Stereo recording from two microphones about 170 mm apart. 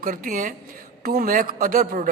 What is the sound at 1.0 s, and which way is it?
A man's voice, 60° right (ahead or behind).